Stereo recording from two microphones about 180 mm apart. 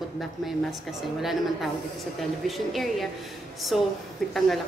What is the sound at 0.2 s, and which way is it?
A woman's voice, centre (ahead or behind).